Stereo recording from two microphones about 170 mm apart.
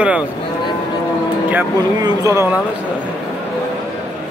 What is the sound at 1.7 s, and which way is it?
Speech, 20° right (ahead or behind).